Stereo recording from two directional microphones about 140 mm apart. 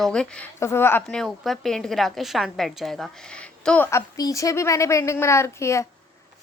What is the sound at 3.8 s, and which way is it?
Speech, 20° left (ahead or behind).